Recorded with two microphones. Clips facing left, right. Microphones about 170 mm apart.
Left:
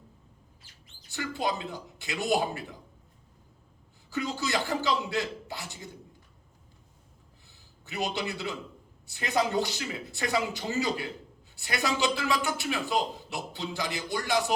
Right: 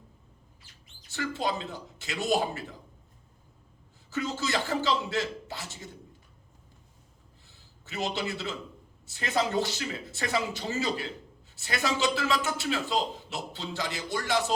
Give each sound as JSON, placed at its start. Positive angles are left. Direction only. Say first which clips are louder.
{"t": 1.4, "sound": "speech", "louder": "left 2 dB", "side_deg": 20}
{"t": 4.1, "sound": "a man's voice", "louder": "even", "side_deg": 20}
{"t": 7.4, "sound": "a sound", "louder": "left 2 dB", "side_deg": 20}
{"t": 9.0, "sound": "a man's voice", "louder": "left 1 dB", "side_deg": 20}